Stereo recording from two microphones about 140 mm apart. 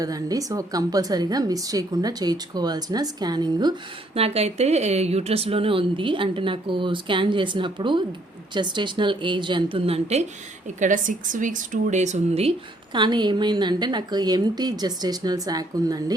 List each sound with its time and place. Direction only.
0.0 s a woman's voice: 25° right (ahead or behind)
4.1 s speech: 45° right (ahead or behind)
10.8 s speech: 65° right (ahead or behind); by 16.1 s 25° right (ahead or behind)